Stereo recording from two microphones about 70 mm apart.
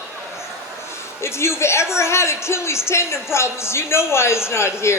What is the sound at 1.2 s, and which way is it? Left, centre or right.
Speech, left.